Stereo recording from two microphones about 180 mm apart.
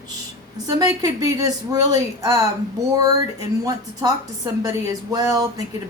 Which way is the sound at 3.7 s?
20° right (ahead or behind).